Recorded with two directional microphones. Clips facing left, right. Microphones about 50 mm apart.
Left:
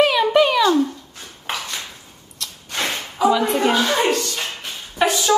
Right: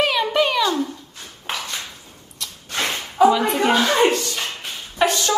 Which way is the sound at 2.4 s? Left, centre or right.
Centre.